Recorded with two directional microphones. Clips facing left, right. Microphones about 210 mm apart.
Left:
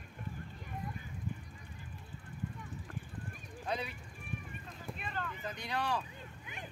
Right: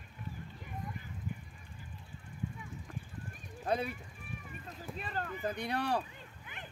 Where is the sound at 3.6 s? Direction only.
50° right (ahead or behind).